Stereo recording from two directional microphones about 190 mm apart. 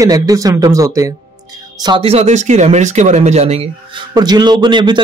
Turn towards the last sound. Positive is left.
turn(degrees=-25)  # may be behind; listen again after turning